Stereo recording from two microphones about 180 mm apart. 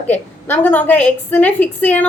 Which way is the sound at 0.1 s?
10° left (ahead or behind).